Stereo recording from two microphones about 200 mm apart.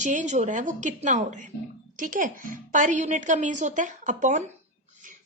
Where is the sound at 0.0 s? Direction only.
40° right (ahead or behind).